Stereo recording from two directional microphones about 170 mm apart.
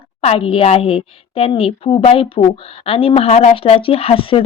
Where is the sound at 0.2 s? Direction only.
35° left (ahead or behind).